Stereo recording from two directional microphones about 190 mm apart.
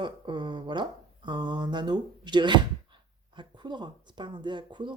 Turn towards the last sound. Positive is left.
turn(degrees=-25)  # may be behind; listen again after turning